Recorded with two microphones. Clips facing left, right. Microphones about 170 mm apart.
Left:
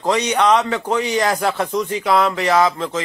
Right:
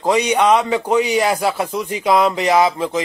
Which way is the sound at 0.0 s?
10° right (ahead or behind).